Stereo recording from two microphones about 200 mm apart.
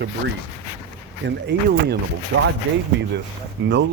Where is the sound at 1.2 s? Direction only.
55° right (ahead or behind).